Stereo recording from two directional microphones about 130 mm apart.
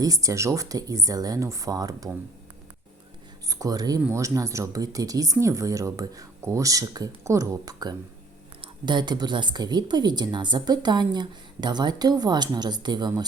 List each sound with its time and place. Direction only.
0.0 s speech: 25° right (ahead or behind)
3.5 s speech: 30° right (ahead or behind)